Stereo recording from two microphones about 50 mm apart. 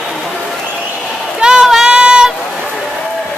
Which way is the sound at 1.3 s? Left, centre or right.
Centre.